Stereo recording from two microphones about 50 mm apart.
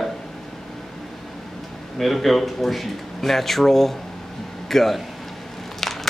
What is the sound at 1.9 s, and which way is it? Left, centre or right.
Speech, centre.